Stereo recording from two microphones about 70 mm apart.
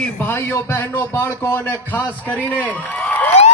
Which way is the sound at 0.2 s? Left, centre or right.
Left.